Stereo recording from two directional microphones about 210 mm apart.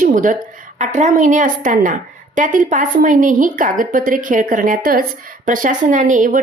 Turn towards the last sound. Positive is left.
turn(degrees=-40)  # may be behind; listen again after turning